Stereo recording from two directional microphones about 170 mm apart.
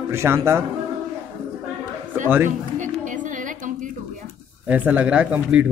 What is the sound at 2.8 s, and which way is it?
Music, 50° right (ahead or behind).